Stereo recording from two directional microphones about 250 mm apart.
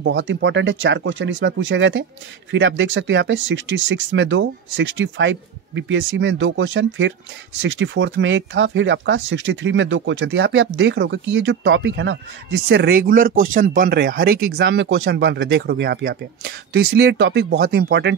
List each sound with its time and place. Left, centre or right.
0.0 s speech: right